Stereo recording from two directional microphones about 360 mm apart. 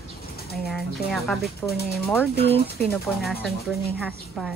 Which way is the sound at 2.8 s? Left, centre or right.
Centre.